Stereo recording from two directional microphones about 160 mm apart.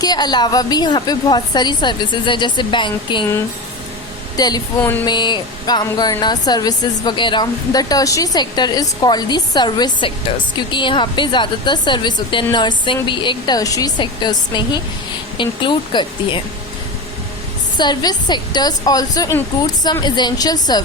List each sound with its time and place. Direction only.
0.0 s speech: 25° left (ahead or behind)
4.4 s speech: 25° left (ahead or behind)
4.8 s a sound: 10° left (ahead or behind)
5.0 s speech: 30° left (ahead or behind)
17.7 s speech: 25° left (ahead or behind)